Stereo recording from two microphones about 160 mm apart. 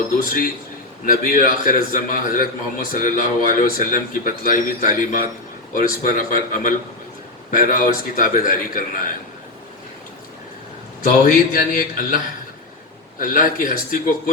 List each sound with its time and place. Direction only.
0.2 s a man's voice: 60° left (ahead or behind)
11.0 s a man's voice: 60° left (ahead or behind)